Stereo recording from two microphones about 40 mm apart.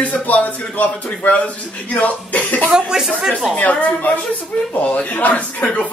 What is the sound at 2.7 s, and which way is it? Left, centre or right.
Speech, centre.